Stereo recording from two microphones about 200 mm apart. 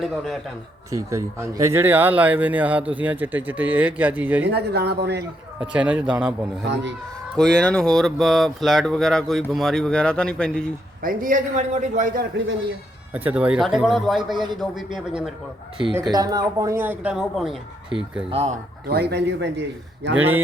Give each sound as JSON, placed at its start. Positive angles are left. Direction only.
{"t": 0.0, "sound": "speech", "side_deg": 0}
{"t": 0.9, "sound": "speech", "side_deg": -15}
{"t": 4.4, "sound": "speech", "side_deg": -55}
{"t": 5.5, "sound": "speech", "side_deg": -5}
{"t": 11.0, "sound": "a man's voice", "side_deg": -40}
{"t": 13.1, "sound": "speech", "side_deg": -10}
{"t": 16.0, "sound": "speech", "side_deg": -20}
{"t": 18.3, "sound": "a man's voice", "side_deg": -30}
{"t": 18.9, "sound": "speech", "side_deg": -50}